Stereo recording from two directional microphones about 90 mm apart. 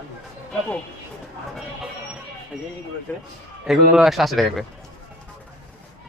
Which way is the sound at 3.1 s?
20° left (ahead or behind).